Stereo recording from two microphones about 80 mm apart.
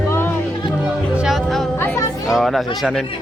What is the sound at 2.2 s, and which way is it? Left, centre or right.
Speech, centre.